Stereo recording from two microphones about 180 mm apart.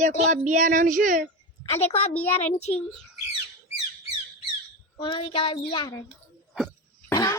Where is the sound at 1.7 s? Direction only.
35° left (ahead or behind).